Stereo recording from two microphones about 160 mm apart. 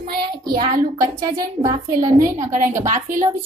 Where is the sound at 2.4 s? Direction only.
50° right (ahead or behind).